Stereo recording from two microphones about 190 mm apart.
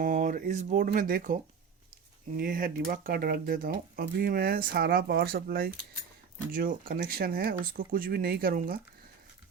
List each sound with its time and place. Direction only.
0.0 s speech: 45° right (ahead or behind)
2.4 s speech: 50° right (ahead or behind)